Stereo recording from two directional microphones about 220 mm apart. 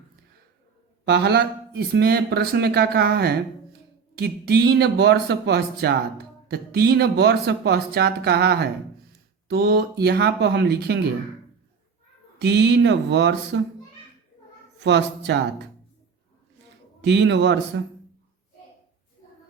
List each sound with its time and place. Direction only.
1.0 s speech: 50° right (ahead or behind)
12.4 s speech: 50° right (ahead or behind)
14.8 s speech: 50° right (ahead or behind)
17.0 s speech: 50° right (ahead or behind)